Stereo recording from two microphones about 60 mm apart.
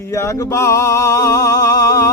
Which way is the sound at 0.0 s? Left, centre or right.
Left.